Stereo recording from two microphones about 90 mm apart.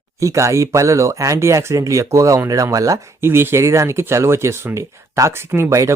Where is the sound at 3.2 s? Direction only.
25° right (ahead or behind).